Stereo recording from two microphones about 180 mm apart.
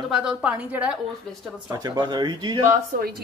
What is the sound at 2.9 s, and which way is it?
Speech, 50° right (ahead or behind).